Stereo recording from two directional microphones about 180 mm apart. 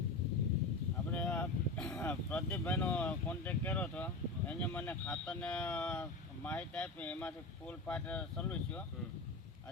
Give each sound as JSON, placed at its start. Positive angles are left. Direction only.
{"t": 1.1, "sound": "vehicle", "side_deg": 5}
{"t": 1.9, "sound": "speech", "side_deg": 10}